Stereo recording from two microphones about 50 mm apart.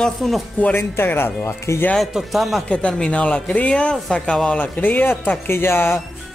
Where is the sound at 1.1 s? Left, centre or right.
Left.